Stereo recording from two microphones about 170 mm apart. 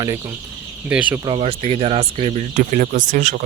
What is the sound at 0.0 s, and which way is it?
Speech, 20° right (ahead or behind).